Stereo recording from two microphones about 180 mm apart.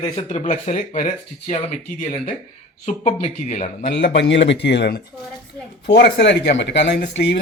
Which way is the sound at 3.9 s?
70° left (ahead or behind).